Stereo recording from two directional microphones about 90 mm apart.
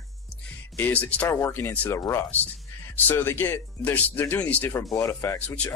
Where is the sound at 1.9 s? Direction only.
30° left (ahead or behind); by 4.7 s 15° left (ahead or behind).